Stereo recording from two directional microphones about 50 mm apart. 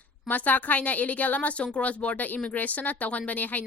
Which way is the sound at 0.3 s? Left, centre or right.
Left.